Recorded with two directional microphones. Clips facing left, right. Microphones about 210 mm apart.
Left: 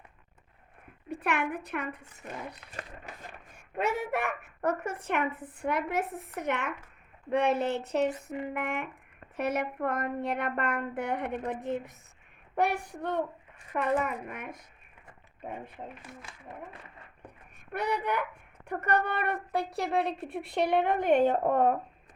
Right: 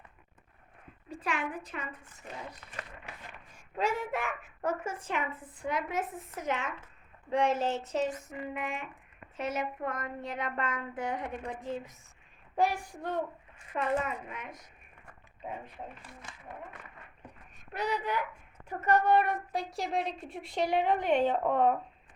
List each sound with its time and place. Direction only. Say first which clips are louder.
1.1 s a woman's voice: left 4 dB; 65° left (ahead or behind)
2.7 s speech: left 2 dB; 40° left (ahead or behind)
3.5 s a woman's voice: left 1 dB; 65° left (ahead or behind)
17.7 s a woman's voice: left 2 dB; 60° left (ahead or behind)